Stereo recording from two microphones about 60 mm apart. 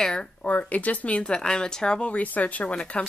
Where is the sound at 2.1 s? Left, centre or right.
Left.